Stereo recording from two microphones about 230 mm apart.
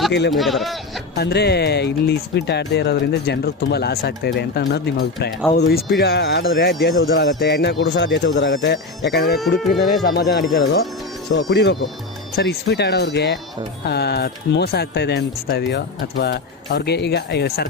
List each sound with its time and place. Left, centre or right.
0.1 s speech: left
0.3 s speech: centre
1.1 s speech: left